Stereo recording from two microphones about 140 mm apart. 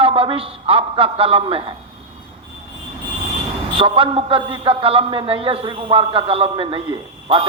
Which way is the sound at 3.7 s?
40° right (ahead or behind).